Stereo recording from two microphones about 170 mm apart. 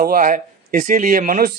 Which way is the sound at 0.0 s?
55° right (ahead or behind).